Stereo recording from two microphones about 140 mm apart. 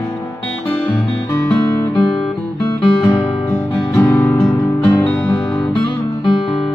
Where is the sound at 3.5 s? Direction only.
15° left (ahead or behind).